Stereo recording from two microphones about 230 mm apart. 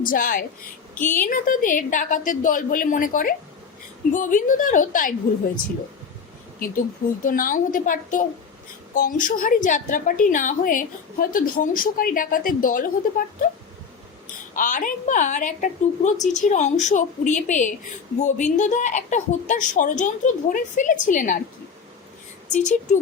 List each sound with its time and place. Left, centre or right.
0.0 s a woman's voice: left
0.9 s a woman's voice: centre
1.3 s a woman's voice: left
7.3 s a woman's voice: left
14.5 s a woman's voice: left
22.4 s a woman's voice: left